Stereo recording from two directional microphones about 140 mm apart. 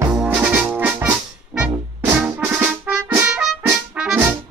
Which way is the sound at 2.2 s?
10° right (ahead or behind).